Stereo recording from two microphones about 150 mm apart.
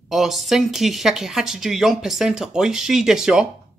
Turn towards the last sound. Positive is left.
turn(degrees=-5)  # may be behind; listen again after turning